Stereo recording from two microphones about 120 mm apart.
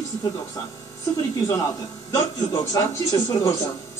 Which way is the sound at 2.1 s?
30° left (ahead or behind).